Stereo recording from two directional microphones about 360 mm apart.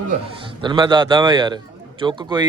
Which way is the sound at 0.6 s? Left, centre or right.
Centre.